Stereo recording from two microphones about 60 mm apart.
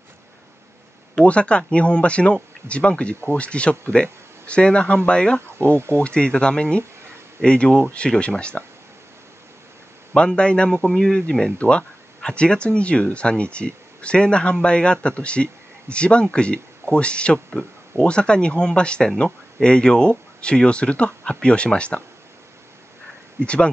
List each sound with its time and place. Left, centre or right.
1.1 s speech: centre
10.1 s speech: centre
23.4 s speech: centre